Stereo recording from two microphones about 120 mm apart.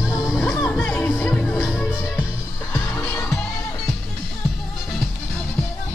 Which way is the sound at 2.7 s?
15° left (ahead or behind).